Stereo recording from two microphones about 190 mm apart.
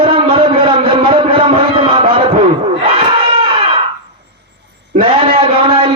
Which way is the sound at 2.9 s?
30° right (ahead or behind).